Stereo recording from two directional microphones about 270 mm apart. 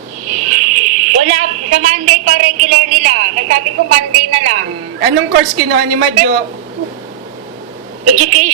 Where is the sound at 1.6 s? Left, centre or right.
Right.